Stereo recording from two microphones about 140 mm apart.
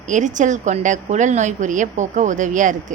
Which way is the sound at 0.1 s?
60° right (ahead or behind).